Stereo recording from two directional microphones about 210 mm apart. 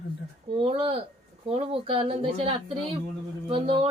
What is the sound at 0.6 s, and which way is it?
Speech, 25° right (ahead or behind).